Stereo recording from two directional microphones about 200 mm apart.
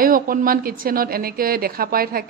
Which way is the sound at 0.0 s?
45° right (ahead or behind).